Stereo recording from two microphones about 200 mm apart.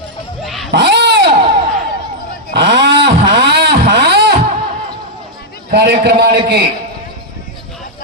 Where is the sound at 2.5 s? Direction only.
60° right (ahead or behind).